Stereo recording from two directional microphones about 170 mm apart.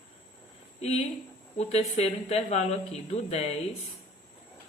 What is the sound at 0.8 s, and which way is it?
A woman's voice, 40° left (ahead or behind).